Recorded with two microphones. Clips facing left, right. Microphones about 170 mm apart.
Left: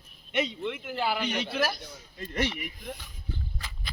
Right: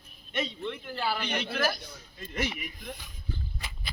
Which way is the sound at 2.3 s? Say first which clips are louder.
Left 3 dB; 10° right (ahead or behind).